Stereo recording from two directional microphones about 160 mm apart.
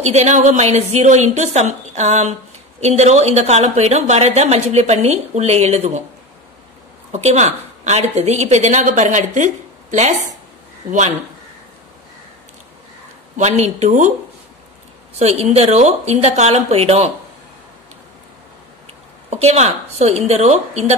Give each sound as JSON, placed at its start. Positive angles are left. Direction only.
{"t": 0.0, "sound": "a woman's voice", "side_deg": -45}
{"t": 7.1, "sound": "a woman's voice", "side_deg": -45}
{"t": 13.4, "sound": "a woman's voice", "side_deg": -45}
{"t": 15.1, "sound": "speech", "side_deg": -40}
{"t": 19.3, "sound": "a woman's voice", "side_deg": -40}